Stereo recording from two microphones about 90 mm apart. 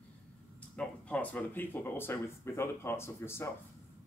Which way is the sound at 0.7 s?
15° left (ahead or behind).